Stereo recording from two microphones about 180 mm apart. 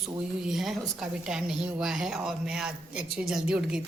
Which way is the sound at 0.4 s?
Centre (ahead or behind).